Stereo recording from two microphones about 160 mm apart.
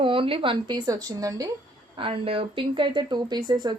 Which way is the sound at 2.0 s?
35° right (ahead or behind).